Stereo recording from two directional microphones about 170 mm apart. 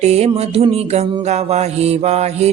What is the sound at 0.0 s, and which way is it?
Mantra, 40° right (ahead or behind).